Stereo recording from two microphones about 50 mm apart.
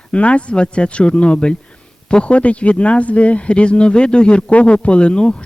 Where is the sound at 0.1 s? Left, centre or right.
Left.